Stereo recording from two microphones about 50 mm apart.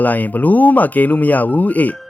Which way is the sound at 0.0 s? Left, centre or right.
Left.